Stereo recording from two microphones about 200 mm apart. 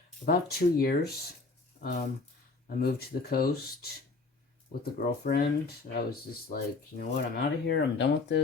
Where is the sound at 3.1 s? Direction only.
50° left (ahead or behind).